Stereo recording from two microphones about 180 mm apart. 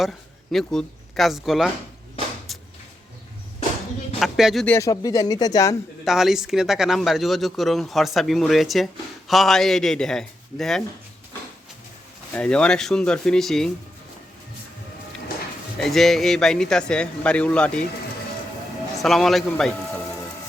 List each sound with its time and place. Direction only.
0.0 s speech: centre (ahead or behind)
2.5 s a sound: centre (ahead or behind)
4.2 s speech: centre (ahead or behind)
4.8 s speech: 20° left (ahead or behind)
6.1 s speech: centre (ahead or behind)
12.3 s speech: 5° left (ahead or behind)
15.8 s speech: centre (ahead or behind)
19.0 s speech: centre (ahead or behind)